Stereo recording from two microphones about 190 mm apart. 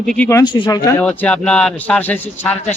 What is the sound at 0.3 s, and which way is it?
Speech, 20° left (ahead or behind).